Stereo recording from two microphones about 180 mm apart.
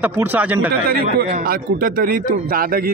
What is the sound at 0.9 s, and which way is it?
A man's voice, 60° right (ahead or behind).